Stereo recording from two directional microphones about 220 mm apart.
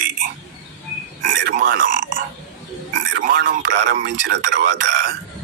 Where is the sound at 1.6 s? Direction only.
40° right (ahead or behind).